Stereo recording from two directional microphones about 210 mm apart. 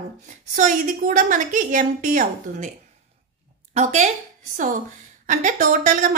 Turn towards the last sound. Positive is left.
turn(degrees=-40)  # may be behind; listen again after turning